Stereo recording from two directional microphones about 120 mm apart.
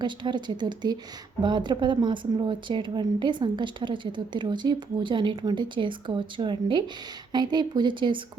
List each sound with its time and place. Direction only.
0.0 s speech: 40° right (ahead or behind)